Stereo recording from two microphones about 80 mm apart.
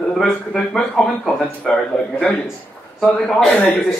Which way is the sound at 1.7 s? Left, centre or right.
Centre.